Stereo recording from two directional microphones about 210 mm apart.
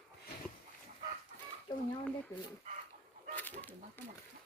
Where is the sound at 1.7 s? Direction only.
20° left (ahead or behind).